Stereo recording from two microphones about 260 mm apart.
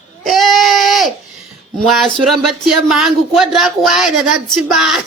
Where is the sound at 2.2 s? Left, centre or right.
Right.